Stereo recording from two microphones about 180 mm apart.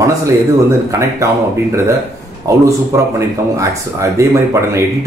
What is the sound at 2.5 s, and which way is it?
A man's voice, 15° right (ahead or behind).